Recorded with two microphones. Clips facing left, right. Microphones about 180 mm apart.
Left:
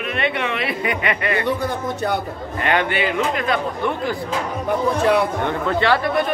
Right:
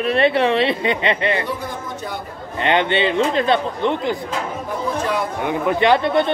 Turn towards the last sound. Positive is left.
turn(degrees=-25)  # may be behind; listen again after turning